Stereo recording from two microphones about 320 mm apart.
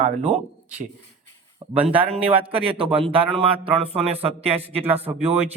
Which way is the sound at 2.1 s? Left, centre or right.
Centre.